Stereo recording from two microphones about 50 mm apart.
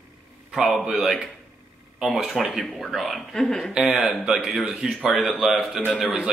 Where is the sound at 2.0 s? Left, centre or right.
Centre.